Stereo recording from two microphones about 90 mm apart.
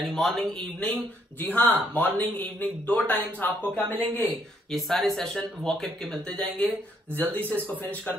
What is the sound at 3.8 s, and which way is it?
Speech, 20° right (ahead or behind).